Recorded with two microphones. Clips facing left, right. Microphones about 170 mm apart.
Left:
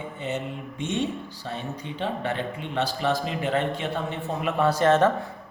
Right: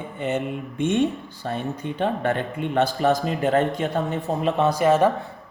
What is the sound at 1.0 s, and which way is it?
Speech, 55° right (ahead or behind).